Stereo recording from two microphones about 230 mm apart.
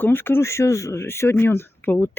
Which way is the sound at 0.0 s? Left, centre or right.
Centre.